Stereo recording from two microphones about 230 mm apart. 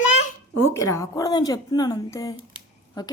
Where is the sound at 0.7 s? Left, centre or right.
Centre.